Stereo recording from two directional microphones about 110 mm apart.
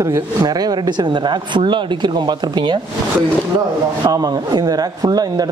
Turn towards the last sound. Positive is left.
turn(degrees=-35)  # may be behind; listen again after turning